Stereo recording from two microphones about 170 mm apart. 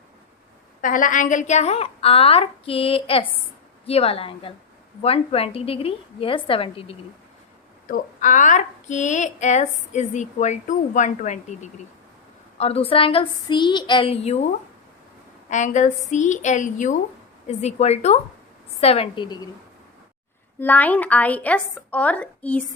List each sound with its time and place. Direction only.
0.8 s a woman's voice: 50° left (ahead or behind); by 6.9 s 30° left (ahead or behind)
7.9 s a woman's voice: 50° left (ahead or behind); by 14.3 s 35° left (ahead or behind)
15.4 s a woman's voice: 45° left (ahead or behind); by 19.5 s 25° left (ahead or behind)
20.6 s a woman's voice: 10° left (ahead or behind)